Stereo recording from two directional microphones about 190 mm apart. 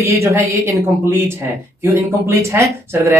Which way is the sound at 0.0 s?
15° right (ahead or behind).